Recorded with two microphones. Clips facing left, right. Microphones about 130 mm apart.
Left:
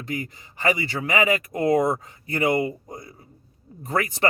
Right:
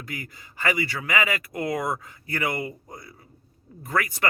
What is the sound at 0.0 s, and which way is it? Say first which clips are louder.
Speech: left 7 dB; 25° left (ahead or behind).